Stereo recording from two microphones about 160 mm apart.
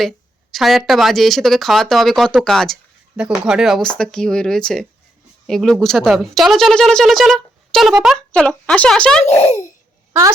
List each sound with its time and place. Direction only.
0.5 s speech: centre (ahead or behind)
10.1 s a woman's voice: 20° right (ahead or behind)